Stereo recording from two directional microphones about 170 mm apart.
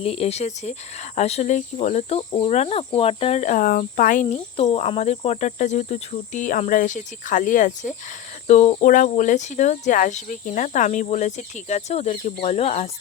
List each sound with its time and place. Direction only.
0.0 s speech: 35° left (ahead or behind)
4.5 s speech: 35° left (ahead or behind)